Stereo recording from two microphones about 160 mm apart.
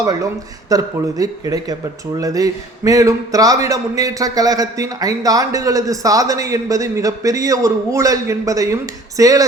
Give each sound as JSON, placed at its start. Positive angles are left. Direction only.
{"t": 0.0, "sound": "a man's voice", "side_deg": -25}